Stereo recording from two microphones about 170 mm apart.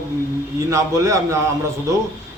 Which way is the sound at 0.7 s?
20° right (ahead or behind).